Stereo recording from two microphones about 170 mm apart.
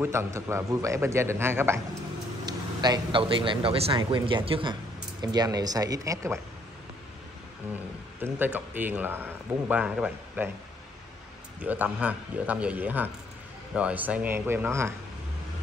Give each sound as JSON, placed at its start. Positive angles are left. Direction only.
{"t": 0.0, "sound": "a man's voice", "side_deg": -15}
{"t": 2.4, "sound": "a man's voice", "side_deg": -25}
{"t": 8.2, "sound": "a man's voice", "side_deg": -10}
{"t": 11.6, "sound": "a man's voice", "side_deg": -10}